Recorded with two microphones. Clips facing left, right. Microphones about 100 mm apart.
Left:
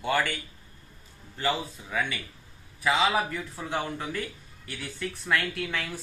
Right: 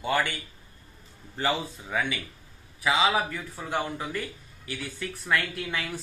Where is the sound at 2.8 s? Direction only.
10° right (ahead or behind).